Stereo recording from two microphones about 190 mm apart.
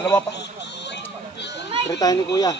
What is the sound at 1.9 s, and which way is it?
Speech, 20° left (ahead or behind).